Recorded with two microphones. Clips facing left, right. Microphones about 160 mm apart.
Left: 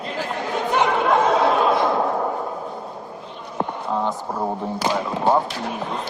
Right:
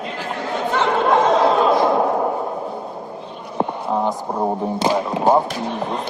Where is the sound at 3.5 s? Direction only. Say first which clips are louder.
Right 3 dB; 20° right (ahead or behind).